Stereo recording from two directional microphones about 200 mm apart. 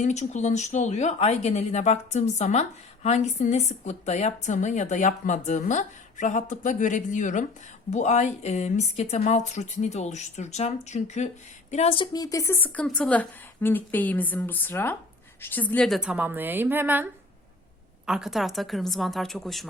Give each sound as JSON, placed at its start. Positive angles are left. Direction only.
{"t": 0.0, "sound": "a woman's voice", "side_deg": 35}